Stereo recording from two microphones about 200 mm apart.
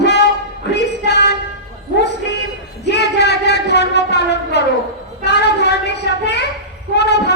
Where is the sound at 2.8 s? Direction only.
55° left (ahead or behind).